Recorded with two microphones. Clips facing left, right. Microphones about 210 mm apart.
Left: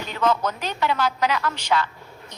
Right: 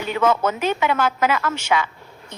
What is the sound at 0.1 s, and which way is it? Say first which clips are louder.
A woman's voice: right 3 dB; 10° right (ahead or behind).